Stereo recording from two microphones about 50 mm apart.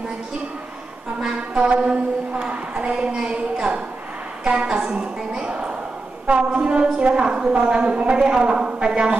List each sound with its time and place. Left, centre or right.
1.2 s a woman's voice: right